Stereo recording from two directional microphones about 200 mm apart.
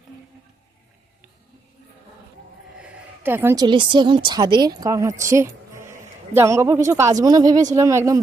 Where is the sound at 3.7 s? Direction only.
25° right (ahead or behind).